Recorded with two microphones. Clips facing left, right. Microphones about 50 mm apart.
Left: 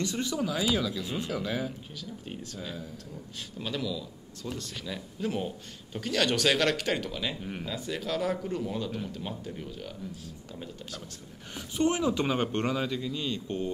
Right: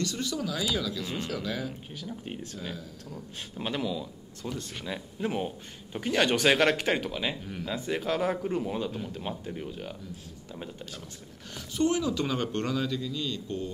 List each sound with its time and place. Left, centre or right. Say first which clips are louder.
0.0 s speech: left 1 dB; left
2.0 s speech: right 2 dB; right
11.5 s speech: right 1 dB; left